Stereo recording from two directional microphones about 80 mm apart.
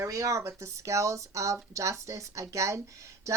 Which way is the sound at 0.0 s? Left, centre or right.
Right.